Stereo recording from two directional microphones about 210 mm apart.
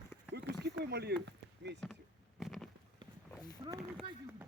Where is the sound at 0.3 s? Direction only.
50° right (ahead or behind).